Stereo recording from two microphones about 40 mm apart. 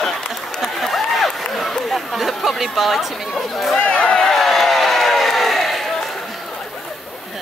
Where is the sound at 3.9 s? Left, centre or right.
Left.